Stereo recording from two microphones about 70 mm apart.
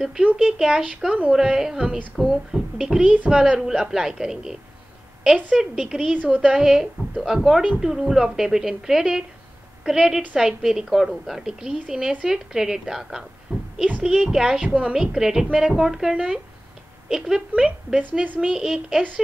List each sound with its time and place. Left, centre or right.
0.0 s a woman's voice: centre
5.6 s a woman's voice: centre
13.5 s a sound: right
14.0 s a woman's voice: centre